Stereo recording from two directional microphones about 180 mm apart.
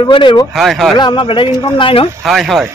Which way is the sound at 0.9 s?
25° left (ahead or behind).